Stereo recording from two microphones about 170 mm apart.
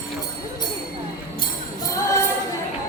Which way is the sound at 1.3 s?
20° left (ahead or behind).